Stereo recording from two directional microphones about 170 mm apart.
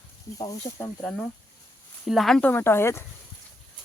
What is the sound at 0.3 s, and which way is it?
Speech, 25° left (ahead or behind).